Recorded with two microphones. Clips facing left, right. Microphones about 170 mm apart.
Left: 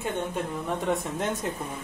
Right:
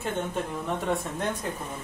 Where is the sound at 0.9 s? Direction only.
20° left (ahead or behind).